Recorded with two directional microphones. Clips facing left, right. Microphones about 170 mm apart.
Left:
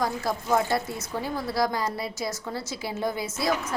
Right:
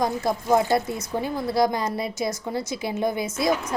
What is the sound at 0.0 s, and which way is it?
A woman's voice, 20° right (ahead or behind).